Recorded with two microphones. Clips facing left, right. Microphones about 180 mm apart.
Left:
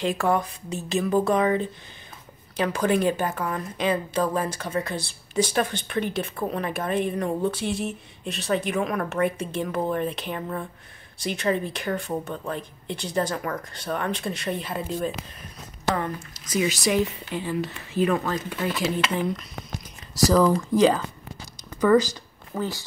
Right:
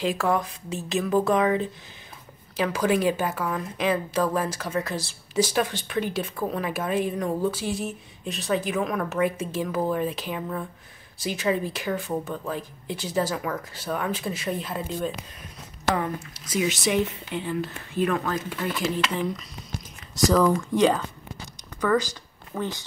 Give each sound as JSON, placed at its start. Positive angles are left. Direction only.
{"t": 0.0, "sound": "a woman's voice", "side_deg": 0}
{"t": 20.2, "sound": "a woman's voice", "side_deg": 0}
{"t": 22.5, "sound": "speech", "side_deg": 5}